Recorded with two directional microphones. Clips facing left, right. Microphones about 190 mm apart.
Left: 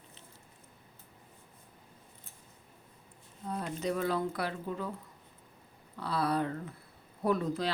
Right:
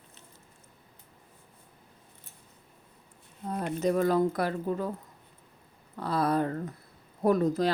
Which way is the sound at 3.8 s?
45° right (ahead or behind).